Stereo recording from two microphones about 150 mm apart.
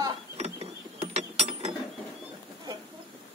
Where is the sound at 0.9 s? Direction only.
45° right (ahead or behind).